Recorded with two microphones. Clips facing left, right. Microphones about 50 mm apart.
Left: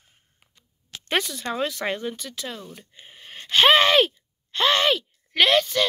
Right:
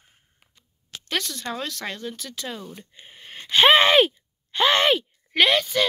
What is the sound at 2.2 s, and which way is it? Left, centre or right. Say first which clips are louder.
Speech: right 1 dB; centre.